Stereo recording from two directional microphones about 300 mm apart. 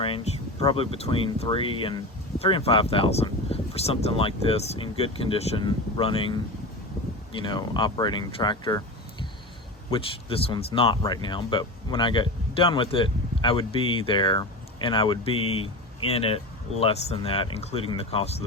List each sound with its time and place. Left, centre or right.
0.6 s speech: centre